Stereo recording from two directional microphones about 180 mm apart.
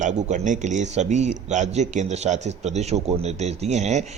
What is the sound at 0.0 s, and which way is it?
Speech, 40° right (ahead or behind).